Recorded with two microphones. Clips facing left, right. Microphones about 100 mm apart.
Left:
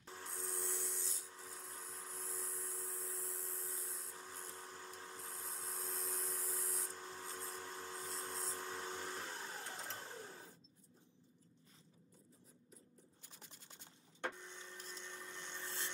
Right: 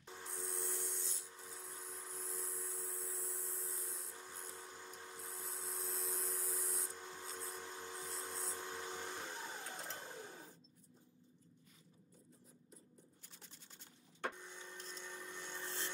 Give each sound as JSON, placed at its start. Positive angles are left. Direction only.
{"t": 0.0, "sound": "a sound", "side_deg": 0}
{"t": 14.2, "sound": "printer", "side_deg": -5}
{"t": 14.8, "sound": "vehicle", "side_deg": 5}